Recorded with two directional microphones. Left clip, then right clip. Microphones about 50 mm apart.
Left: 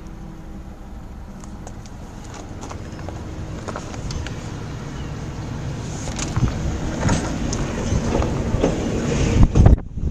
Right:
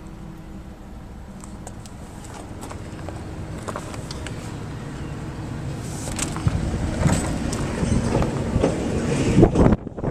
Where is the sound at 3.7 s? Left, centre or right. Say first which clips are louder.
Left 1 dB; centre.